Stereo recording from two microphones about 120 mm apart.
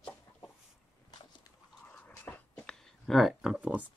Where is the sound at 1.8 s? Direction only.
15° left (ahead or behind).